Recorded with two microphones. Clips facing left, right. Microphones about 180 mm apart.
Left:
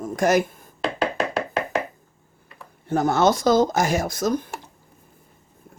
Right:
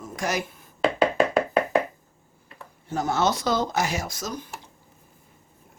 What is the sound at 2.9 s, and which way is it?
Speech, 55° left (ahead or behind).